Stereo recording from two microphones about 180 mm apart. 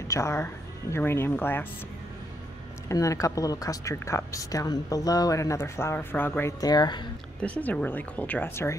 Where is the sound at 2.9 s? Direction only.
15° left (ahead or behind).